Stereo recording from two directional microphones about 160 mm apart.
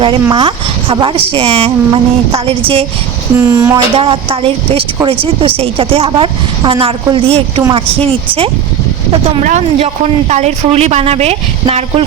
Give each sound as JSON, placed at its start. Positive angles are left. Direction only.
{"t": 0.0, "sound": "speech", "side_deg": -35}
{"t": 3.3, "sound": "speech", "side_deg": -15}
{"t": 3.9, "sound": "speech", "side_deg": -35}